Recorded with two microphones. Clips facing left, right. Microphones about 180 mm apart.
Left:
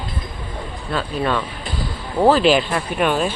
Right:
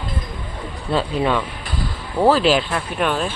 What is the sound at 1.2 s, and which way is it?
Speech, 10° right (ahead or behind).